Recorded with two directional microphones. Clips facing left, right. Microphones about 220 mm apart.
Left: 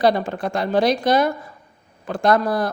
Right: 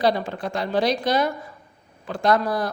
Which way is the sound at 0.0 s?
50° left (ahead or behind).